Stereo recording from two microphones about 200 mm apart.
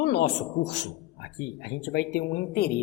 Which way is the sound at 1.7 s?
55° left (ahead or behind).